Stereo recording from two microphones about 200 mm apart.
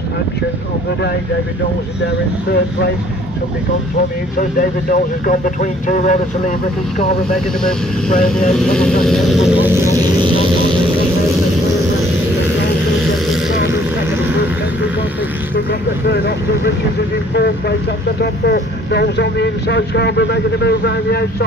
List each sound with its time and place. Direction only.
4.4 s speech: 40° left (ahead or behind)
8.2 s speech: 5° left (ahead or behind)
16.1 s speech: 55° left (ahead or behind)